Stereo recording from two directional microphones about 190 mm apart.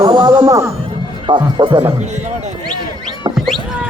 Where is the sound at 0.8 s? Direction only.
25° right (ahead or behind).